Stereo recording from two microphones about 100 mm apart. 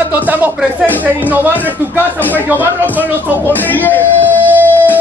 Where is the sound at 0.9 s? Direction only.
15° left (ahead or behind).